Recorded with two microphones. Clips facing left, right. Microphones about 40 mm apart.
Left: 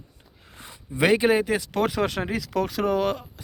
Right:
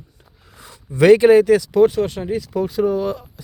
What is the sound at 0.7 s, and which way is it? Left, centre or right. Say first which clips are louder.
Speech: right 9 dB; centre.